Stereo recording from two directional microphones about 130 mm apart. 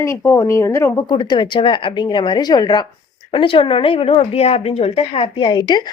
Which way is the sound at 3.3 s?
45° left (ahead or behind).